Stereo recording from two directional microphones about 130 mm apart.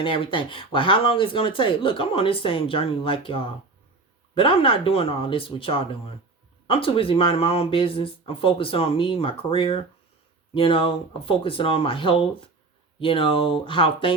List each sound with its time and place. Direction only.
0.0 s speech: 40° left (ahead or behind)